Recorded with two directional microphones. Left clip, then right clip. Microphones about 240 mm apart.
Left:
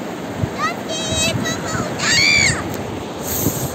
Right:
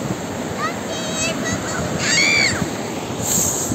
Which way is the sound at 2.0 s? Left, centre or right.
Left.